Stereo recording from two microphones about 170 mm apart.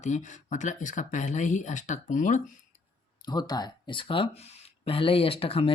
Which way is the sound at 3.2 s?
25° left (ahead or behind).